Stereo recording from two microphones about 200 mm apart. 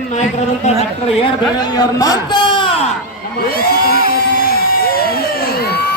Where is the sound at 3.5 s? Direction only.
50° left (ahead or behind).